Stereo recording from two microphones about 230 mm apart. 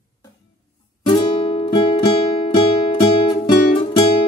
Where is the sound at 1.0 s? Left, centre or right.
Left.